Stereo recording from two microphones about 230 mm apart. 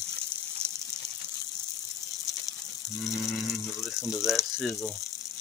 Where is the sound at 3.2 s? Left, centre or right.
Centre.